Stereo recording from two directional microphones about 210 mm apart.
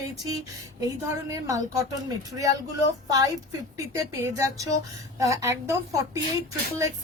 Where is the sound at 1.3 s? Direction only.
15° right (ahead or behind).